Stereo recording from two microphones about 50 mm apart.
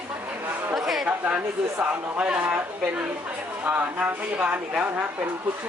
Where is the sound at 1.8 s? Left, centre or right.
Right.